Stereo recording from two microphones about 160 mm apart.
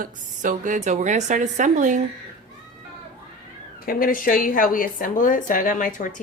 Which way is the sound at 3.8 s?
60° left (ahead or behind).